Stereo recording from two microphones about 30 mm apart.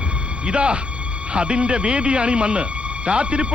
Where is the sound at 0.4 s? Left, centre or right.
Right.